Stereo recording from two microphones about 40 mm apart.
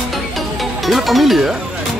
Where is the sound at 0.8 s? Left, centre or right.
Centre.